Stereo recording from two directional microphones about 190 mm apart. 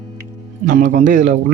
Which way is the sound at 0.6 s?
40° right (ahead or behind).